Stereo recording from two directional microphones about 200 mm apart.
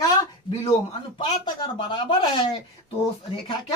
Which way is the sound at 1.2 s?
25° left (ahead or behind).